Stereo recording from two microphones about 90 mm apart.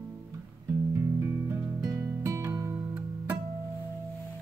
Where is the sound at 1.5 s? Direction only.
30° right (ahead or behind).